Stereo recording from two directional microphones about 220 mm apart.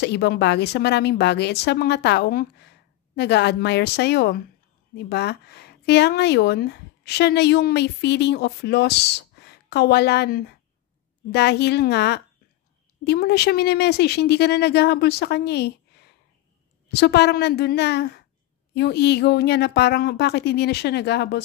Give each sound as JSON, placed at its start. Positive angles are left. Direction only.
{"t": 0.0, "sound": "speech", "side_deg": 50}